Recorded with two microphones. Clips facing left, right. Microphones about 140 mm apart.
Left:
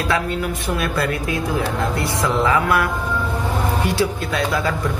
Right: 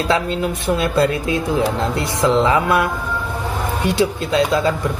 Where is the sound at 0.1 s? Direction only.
25° right (ahead or behind).